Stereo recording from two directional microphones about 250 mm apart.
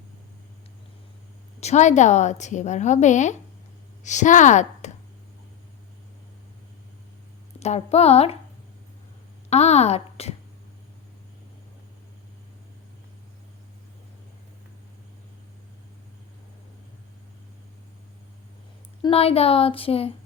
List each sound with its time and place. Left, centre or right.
1.6 s a woman's voice: left
7.6 s a woman's voice: left
9.5 s speech: left
19.0 s a woman's voice: left